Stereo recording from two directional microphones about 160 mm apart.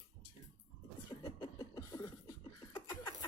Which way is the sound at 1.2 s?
25° left (ahead or behind).